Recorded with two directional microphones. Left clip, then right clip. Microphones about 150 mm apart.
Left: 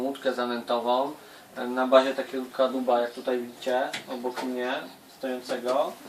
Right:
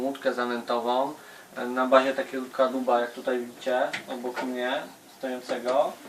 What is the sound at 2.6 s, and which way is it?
Speech, centre (ahead or behind).